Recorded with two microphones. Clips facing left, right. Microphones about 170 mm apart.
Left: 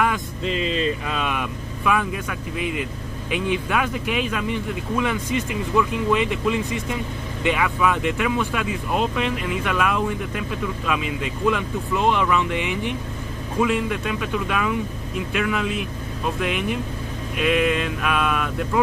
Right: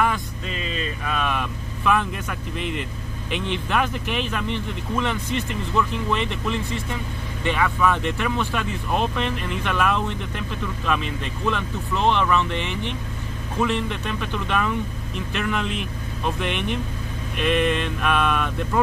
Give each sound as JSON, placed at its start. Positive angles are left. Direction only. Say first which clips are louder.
{"t": 0.5, "sound": "vehicle", "louder": "left 7 dB", "side_deg": 30}
{"t": 1.2, "sound": "speech", "louder": "even", "side_deg": 10}
{"t": 16.3, "sound": "a sound", "louder": "left 2 dB", "side_deg": 5}